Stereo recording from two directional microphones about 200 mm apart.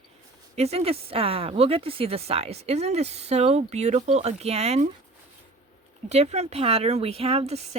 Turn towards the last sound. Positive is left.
turn(degrees=-30)  # may be behind; listen again after turning